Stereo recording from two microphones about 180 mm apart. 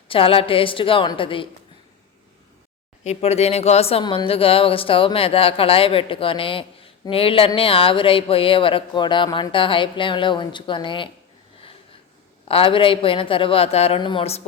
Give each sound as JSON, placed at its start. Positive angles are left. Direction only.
{"t": 0.1, "sound": "speech", "side_deg": 30}
{"t": 3.0, "sound": "speech", "side_deg": 35}
{"t": 12.5, "sound": "speech", "side_deg": 30}